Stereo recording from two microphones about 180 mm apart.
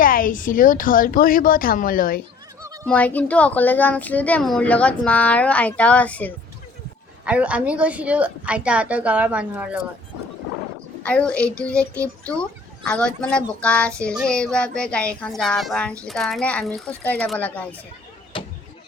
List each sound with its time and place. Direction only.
0.0 s a woman's voice: 50° left (ahead or behind)
2.6 s a sound: 20° right (ahead or behind)
2.8 s speech: 10° left (ahead or behind)
7.3 s a woman's voice: 5° right (ahead or behind)
11.0 s a child's voice: 5° left (ahead or behind)